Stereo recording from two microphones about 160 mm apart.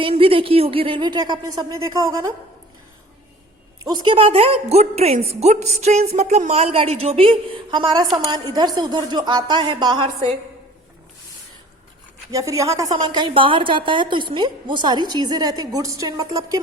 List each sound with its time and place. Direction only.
0.0 s a woman's voice: 35° right (ahead or behind); by 2.3 s 20° right (ahead or behind)
3.8 s a woman's voice: 30° right (ahead or behind)
12.3 s a woman's voice: 20° right (ahead or behind)